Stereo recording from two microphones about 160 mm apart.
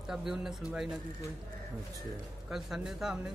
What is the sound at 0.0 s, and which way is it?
Speech, centre (ahead or behind).